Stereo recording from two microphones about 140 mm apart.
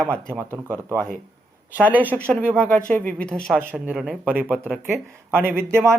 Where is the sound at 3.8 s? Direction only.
5° right (ahead or behind).